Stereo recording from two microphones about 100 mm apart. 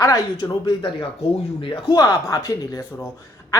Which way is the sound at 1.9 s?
35° left (ahead or behind).